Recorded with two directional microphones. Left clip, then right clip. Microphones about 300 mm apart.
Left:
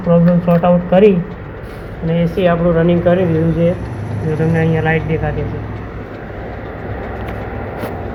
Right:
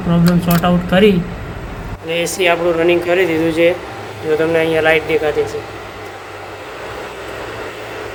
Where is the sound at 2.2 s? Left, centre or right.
Right.